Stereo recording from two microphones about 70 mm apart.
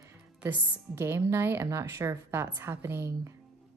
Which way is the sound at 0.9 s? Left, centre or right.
Right.